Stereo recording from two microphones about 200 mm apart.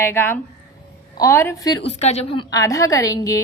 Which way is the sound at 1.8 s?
35° left (ahead or behind).